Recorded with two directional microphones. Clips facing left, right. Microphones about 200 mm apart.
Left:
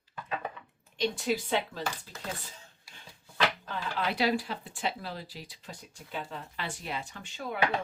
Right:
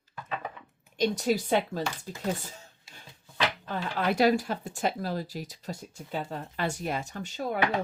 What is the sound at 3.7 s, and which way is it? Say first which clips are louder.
Speech: right 4 dB; 50° right (ahead or behind).